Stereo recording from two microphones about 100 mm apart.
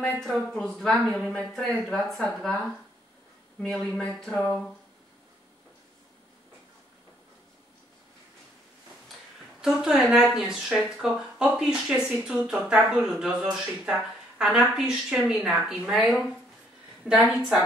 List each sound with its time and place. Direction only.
0.0 s speech: 5° left (ahead or behind)
3.7 s speech: 5° left (ahead or behind)
9.6 s speech: 5° right (ahead or behind)